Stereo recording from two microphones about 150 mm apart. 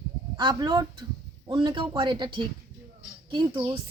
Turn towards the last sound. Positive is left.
turn(degrees=-30)  # may be behind; listen again after turning